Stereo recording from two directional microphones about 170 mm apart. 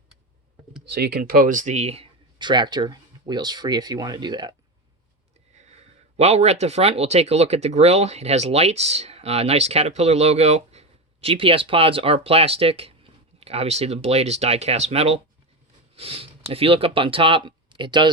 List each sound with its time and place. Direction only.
0.9 s speech: 70° right (ahead or behind); by 4.5 s 25° right (ahead or behind)
6.1 s speech: 40° right (ahead or behind)